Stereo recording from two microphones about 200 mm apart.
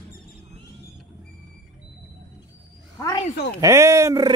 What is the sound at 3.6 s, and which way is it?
Speech, 15° right (ahead or behind).